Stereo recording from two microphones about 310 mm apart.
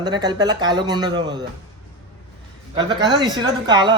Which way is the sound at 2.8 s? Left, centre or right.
Centre.